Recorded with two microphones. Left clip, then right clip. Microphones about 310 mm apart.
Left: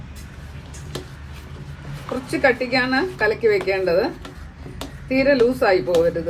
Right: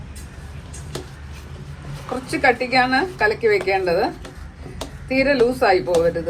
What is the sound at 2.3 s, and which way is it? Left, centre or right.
A woman's voice, centre.